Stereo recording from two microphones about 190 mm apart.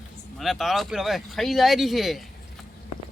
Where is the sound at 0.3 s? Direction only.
Centre (ahead or behind).